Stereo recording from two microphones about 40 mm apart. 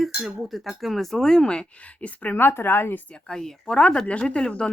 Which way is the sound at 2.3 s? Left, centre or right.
Left.